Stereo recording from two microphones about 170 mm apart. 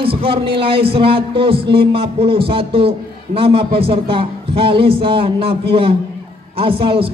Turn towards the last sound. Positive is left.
turn(degrees=-35)  # may be behind; listen again after turning